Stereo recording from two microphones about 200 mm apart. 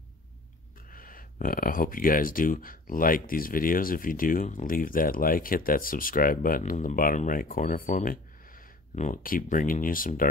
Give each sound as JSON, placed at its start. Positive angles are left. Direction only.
{"t": 0.8, "sound": "speech", "side_deg": 45}